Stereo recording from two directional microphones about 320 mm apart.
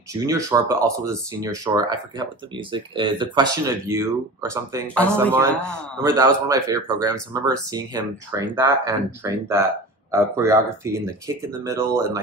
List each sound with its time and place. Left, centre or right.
0.2 s speech: centre
4.8 s speech: centre
6.0 s speech: centre